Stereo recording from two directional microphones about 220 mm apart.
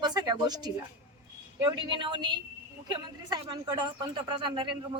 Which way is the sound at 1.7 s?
20° right (ahead or behind).